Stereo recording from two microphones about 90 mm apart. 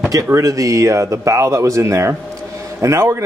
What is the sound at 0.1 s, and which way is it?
A man's voice, 40° right (ahead or behind).